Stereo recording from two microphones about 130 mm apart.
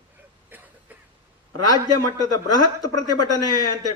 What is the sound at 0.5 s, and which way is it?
Vehicle, 15° right (ahead or behind).